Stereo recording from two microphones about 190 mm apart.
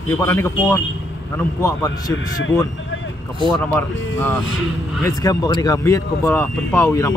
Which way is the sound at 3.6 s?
10° left (ahead or behind).